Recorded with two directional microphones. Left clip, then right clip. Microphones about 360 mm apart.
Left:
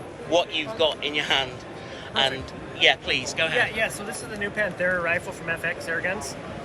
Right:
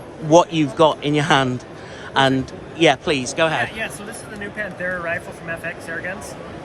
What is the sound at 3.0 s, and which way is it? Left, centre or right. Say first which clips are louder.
Speech: right 6 dB; centre.